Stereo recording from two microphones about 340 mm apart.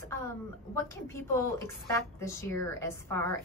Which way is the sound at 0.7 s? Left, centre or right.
Centre.